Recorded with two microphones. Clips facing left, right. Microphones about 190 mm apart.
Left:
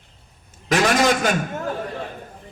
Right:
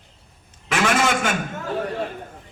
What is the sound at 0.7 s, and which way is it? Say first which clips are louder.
Speech: left 3 dB; 40° left (ahead or behind).